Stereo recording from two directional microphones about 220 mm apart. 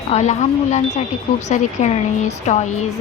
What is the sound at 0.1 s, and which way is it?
A woman's voice, 30° left (ahead or behind).